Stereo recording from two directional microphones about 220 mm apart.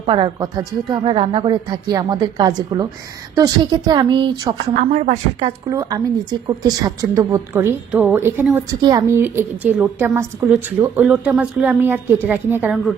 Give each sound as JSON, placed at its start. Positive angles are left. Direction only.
{"t": 0.0, "sound": "speech", "side_deg": -20}
{"t": 4.7, "sound": "speech", "side_deg": -35}
{"t": 5.7, "sound": "a woman's voice", "side_deg": -15}